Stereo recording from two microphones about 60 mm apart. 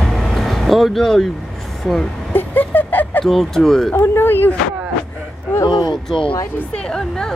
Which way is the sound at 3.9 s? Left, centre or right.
Left.